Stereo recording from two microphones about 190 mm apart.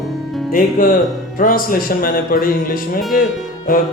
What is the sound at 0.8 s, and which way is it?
Speech, 45° left (ahead or behind).